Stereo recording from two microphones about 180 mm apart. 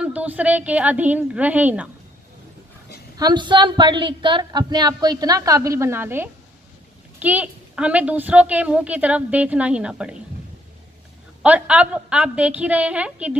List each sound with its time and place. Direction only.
0.0 s a woman's voice: 5° right (ahead or behind)
3.2 s a woman's voice: 25° right (ahead or behind); by 10.1 s 5° right (ahead or behind)
11.4 s a woman's voice: 10° right (ahead or behind)